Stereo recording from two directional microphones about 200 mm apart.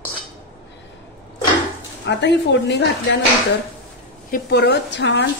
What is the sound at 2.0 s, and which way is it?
Speech, 60° left (ahead or behind).